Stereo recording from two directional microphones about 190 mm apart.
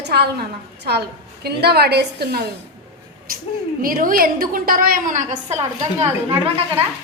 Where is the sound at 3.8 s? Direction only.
45° right (ahead or behind).